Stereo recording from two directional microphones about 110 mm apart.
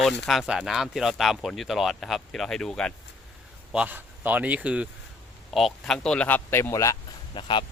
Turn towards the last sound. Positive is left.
turn(degrees=50)  # may be behind; listen again after turning